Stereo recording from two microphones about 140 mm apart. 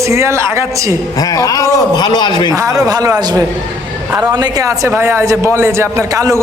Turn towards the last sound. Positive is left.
turn(degrees=-25)  # may be behind; listen again after turning